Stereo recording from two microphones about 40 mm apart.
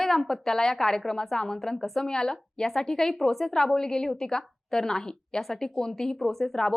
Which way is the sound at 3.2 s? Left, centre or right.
Centre.